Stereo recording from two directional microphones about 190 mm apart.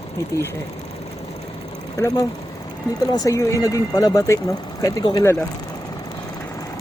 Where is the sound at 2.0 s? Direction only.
20° left (ahead or behind).